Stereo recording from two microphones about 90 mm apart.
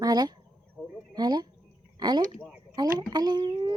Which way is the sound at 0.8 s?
5° right (ahead or behind).